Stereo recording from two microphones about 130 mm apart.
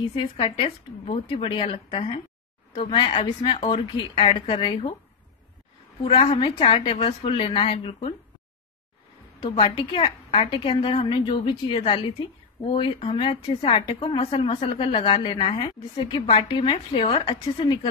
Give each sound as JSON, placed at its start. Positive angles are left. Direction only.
{"t": 0.1, "sound": "a woman's voice", "side_deg": 40}
{"t": 6.0, "sound": "a woman's voice", "side_deg": 40}
{"t": 9.4, "sound": "a woman's voice", "side_deg": 40}